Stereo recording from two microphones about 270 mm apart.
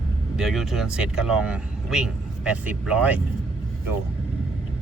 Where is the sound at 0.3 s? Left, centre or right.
Centre.